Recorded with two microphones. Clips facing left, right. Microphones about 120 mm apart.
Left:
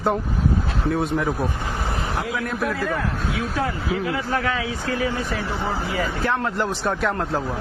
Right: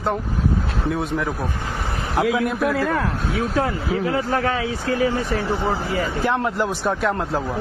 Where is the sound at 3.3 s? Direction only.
35° right (ahead or behind).